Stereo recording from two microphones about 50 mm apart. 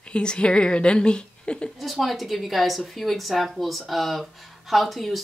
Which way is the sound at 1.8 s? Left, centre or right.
Centre.